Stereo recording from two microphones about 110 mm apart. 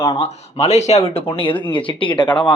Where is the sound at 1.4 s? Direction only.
50° left (ahead or behind).